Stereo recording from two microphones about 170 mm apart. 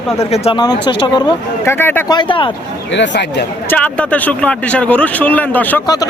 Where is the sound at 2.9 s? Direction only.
90° left.